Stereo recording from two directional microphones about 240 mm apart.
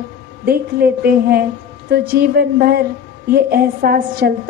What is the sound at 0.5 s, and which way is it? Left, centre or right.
A woman's voice, right.